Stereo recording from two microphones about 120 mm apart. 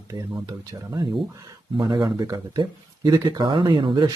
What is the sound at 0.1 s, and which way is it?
Speech, 30° right (ahead or behind).